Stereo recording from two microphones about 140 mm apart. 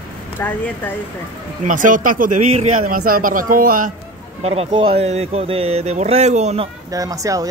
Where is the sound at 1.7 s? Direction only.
70° right (ahead or behind).